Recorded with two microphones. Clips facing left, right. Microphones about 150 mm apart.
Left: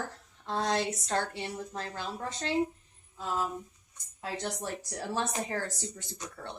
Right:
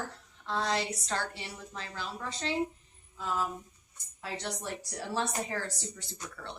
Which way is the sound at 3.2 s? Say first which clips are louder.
Even; 30° left (ahead or behind).